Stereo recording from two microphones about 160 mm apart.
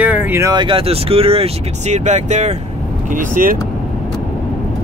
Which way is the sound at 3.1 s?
60° right (ahead or behind).